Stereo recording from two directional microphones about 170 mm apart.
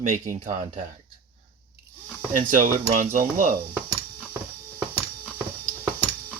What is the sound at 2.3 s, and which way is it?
Speech, 50° right (ahead or behind).